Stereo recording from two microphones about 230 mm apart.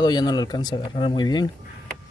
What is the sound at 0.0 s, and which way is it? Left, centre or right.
Speech, centre.